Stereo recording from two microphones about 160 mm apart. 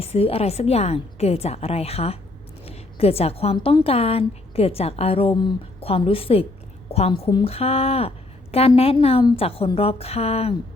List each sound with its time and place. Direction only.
0.0 s a woman's voice: 40° left (ahead or behind)
7.3 s speech: 25° left (ahead or behind)
7.5 s a woman's voice: 40° left (ahead or behind)